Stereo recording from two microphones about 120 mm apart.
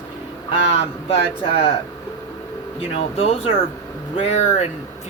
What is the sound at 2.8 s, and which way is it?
Speech, 55° left (ahead or behind).